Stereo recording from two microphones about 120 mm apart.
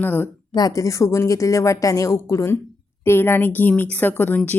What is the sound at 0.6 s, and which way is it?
Speech, 30° left (ahead or behind).